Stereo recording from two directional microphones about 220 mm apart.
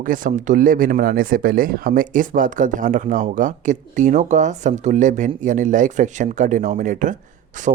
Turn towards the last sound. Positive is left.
turn(degrees=-35)  # may be behind; listen again after turning